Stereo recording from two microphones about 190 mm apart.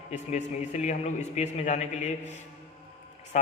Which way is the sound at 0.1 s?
35° left (ahead or behind).